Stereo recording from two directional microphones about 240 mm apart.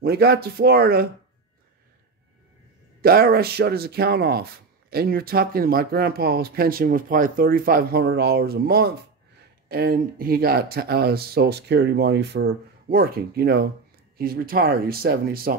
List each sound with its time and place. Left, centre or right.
0.0 s speech: right
3.0 s speech: right